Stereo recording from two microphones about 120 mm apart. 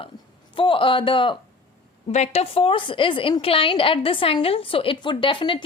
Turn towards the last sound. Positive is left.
turn(degrees=40)  # may be behind; listen again after turning